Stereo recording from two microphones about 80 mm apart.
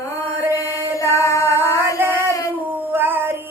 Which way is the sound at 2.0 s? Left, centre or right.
Right.